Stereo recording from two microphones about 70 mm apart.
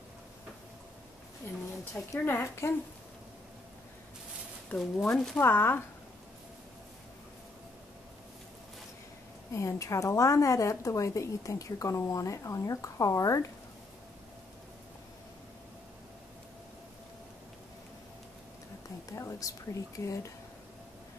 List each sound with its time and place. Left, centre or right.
2.1 s speech: left
4.7 s speech: left
5.1 s speech: centre
5.4 s speech: left
9.5 s a woman's voice: left
19.0 s a woman's voice: left